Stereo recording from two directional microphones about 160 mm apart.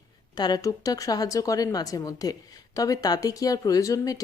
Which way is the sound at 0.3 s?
25° left (ahead or behind).